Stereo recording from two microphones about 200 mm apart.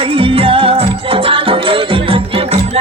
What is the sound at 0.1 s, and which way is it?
Music, 25° right (ahead or behind).